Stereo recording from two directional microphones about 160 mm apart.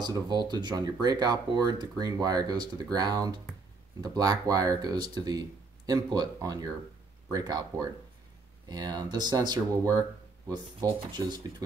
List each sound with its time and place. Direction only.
0.0 s speech: 25° right (ahead or behind)